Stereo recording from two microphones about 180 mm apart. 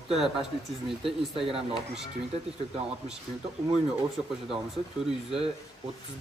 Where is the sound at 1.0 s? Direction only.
30° right (ahead or behind).